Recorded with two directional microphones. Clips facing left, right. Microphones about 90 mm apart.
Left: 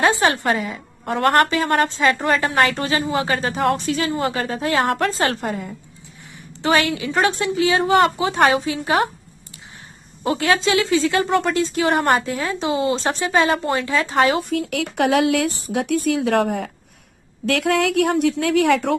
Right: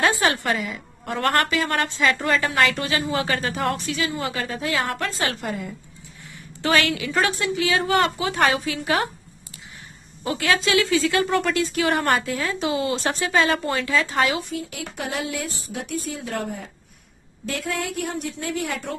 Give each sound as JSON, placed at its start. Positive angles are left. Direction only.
{"t": 0.0, "sound": "a woman's voice", "side_deg": 30}
{"t": 6.6, "sound": "speech", "side_deg": 25}
{"t": 10.2, "sound": "speech", "side_deg": 30}
{"t": 14.5, "sound": "a woman's voice", "side_deg": 70}